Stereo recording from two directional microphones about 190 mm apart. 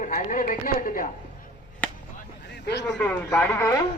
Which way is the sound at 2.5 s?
60° left (ahead or behind).